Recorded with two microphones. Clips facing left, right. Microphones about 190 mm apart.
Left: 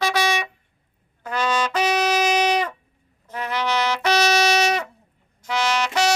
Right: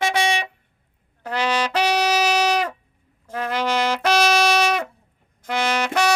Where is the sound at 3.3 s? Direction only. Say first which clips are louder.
Right 2 dB; 45° right (ahead or behind).